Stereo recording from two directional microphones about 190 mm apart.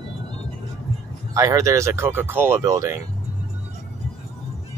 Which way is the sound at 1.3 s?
15° right (ahead or behind).